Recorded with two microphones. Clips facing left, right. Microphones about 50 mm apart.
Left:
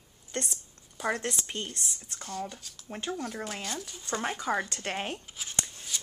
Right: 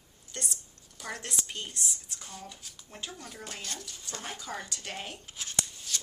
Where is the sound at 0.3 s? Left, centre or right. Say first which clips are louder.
Left 5 dB; left.